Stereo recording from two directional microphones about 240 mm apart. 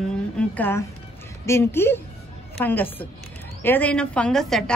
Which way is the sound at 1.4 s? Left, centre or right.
Centre.